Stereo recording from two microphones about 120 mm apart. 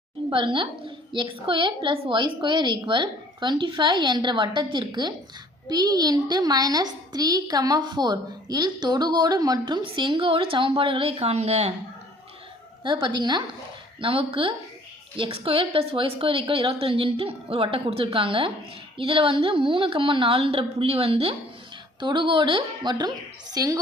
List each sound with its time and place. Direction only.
0.3 s a woman's voice: 45° right (ahead or behind); by 11.7 s 60° right (ahead or behind)
12.8 s a child's voice: 40° right (ahead or behind)
23.6 s a woman's voice: 30° right (ahead or behind)